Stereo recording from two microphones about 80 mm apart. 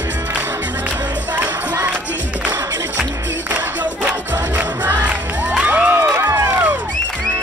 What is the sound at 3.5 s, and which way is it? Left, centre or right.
Music, centre.